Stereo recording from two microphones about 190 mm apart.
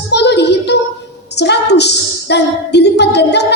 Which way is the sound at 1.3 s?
60° left (ahead or behind).